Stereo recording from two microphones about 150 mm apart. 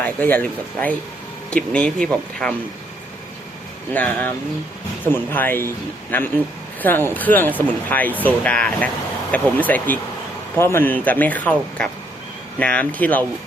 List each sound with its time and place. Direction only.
0.0 s speech: 10° left (ahead or behind)
3.9 s speech: 10° left (ahead or behind)